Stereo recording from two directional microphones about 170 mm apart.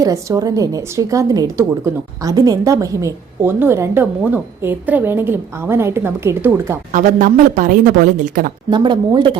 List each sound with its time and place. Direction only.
0.0 s a woman's voice: 20° right (ahead or behind)
6.9 s speech: 50° right (ahead or behind)
8.7 s speech: 25° right (ahead or behind)